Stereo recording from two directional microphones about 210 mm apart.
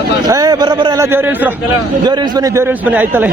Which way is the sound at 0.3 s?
15° right (ahead or behind).